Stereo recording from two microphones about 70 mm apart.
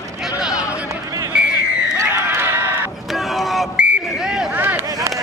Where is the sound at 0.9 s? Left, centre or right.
Right.